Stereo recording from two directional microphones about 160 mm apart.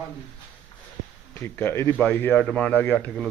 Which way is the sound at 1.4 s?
15° left (ahead or behind).